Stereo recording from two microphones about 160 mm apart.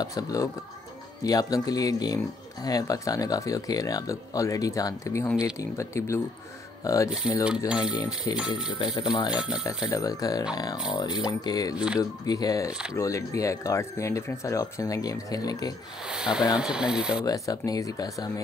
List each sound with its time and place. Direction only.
0.0 s speech: 20° left (ahead or behind)
7.4 s speech: 5° right (ahead or behind)
8.7 s speech: 30° left (ahead or behind)
9.3 s speech: 5° right (ahead or behind)
9.8 s speech: 20° left (ahead or behind)
16.1 s speech: 5° right (ahead or behind)
17.2 s speech: 25° left (ahead or behind)